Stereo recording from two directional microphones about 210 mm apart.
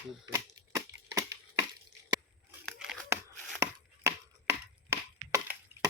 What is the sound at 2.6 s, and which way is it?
Tearing, centre (ahead or behind).